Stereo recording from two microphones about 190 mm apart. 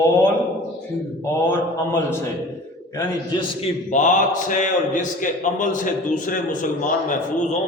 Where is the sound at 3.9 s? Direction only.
40° left (ahead or behind).